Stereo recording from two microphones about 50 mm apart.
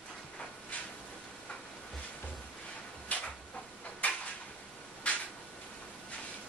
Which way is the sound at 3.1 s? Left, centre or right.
Left.